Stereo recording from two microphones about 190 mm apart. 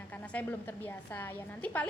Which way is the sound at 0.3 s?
5° left (ahead or behind).